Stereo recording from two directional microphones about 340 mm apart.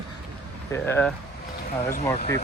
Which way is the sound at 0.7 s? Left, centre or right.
Centre.